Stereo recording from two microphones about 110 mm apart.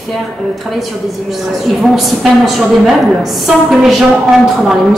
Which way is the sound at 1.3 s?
Centre (ahead or behind).